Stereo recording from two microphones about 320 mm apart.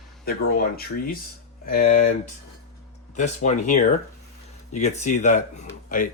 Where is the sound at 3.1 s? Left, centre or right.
Left.